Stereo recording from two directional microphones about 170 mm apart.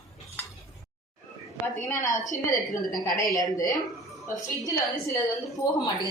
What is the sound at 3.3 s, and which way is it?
Speech, 20° left (ahead or behind).